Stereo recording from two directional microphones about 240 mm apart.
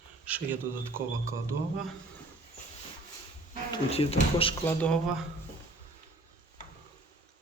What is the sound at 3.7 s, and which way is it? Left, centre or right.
Speech, left.